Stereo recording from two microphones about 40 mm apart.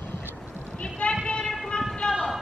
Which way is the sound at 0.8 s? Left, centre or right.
Left.